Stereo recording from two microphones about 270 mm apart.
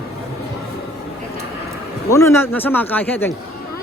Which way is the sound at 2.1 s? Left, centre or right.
Centre.